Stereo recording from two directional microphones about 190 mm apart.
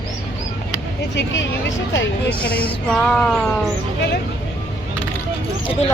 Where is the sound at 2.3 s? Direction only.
5° left (ahead or behind).